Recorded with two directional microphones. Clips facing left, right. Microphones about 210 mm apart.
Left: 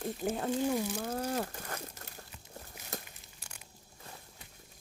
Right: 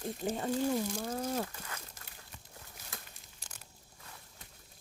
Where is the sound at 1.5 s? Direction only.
45° left (ahead or behind).